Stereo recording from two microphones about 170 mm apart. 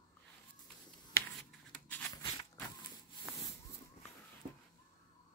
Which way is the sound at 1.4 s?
10° left (ahead or behind).